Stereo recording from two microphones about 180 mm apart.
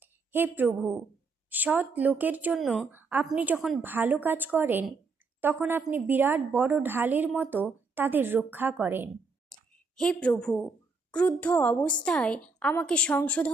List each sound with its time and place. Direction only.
0.0 s a woman's voice: 10° right (ahead or behind)
2.9 s a woman's voice: 10° right (ahead or behind)
9.5 s a sound: 5° left (ahead or behind)
11.1 s a woman's voice: 5° left (ahead or behind)